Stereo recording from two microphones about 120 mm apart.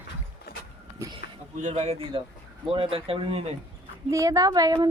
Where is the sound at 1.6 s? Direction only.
60° right (ahead or behind).